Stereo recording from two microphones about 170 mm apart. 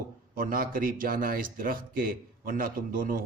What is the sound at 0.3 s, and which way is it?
Speech, 55° right (ahead or behind).